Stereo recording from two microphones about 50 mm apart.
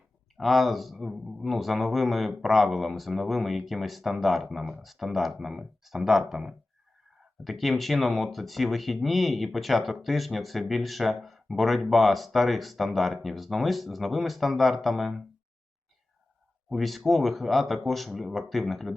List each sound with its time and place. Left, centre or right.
0.3 s speech: centre
16.6 s speech: centre